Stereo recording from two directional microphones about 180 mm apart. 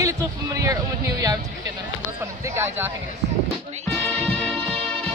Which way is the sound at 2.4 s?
15° right (ahead or behind).